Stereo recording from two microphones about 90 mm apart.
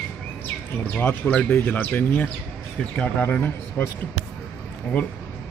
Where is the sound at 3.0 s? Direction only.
15° left (ahead or behind).